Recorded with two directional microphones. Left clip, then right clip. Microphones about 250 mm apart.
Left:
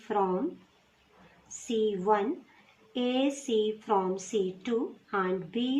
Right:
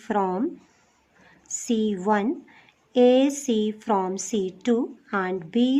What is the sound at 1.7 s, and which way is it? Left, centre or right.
A woman's voice, right.